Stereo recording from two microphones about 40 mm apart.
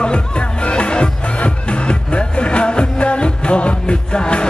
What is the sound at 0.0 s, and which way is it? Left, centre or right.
Music, left.